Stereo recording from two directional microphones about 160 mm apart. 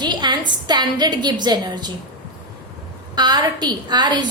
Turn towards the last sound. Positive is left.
turn(degrees=-25)  # may be behind; listen again after turning